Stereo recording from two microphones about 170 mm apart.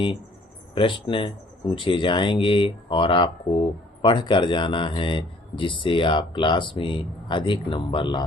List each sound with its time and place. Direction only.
0.7 s a man's voice: 30° left (ahead or behind)